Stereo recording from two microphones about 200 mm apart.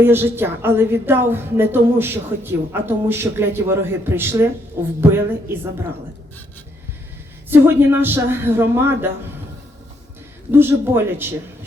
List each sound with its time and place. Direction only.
0.0 s a woman's voice: 10° right (ahead or behind)
7.5 s a woman's voice: 10° right (ahead or behind)
10.5 s a woman's voice: 10° right (ahead or behind)